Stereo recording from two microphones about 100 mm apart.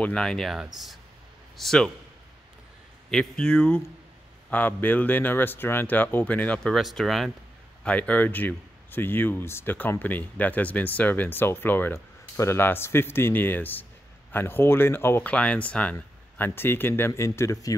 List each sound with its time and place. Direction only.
0.0 s speech: 5° left (ahead or behind)
3.1 s speech: 5° left (ahead or behind)
6.7 s speech: centre (ahead or behind)
7.8 s speech: 15° left (ahead or behind); by 17.7 s 35° left (ahead or behind)